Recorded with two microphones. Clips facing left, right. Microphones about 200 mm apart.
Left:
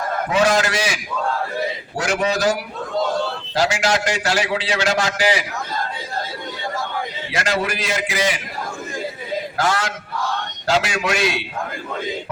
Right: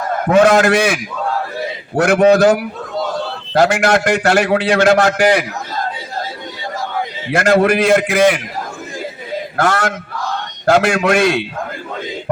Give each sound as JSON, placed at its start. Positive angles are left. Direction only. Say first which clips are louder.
{"t": 0.3, "sound": "a man's voice", "louder": "right 8 dB", "side_deg": -55}
{"t": 2.0, "sound": "a man's voice", "louder": "right 11 dB", "side_deg": -55}
{"t": 7.3, "sound": "a man's voice", "louder": "right 11 dB", "side_deg": -55}
{"t": 9.6, "sound": "a man's voice", "louder": "right 7 dB", "side_deg": -55}